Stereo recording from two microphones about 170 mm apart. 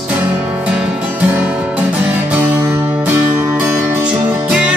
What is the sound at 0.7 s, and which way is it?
Music, 5° right (ahead or behind).